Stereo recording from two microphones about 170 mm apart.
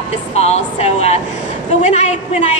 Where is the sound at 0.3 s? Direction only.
40° left (ahead or behind).